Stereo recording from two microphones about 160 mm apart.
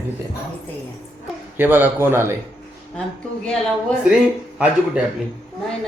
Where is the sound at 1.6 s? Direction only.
10° right (ahead or behind).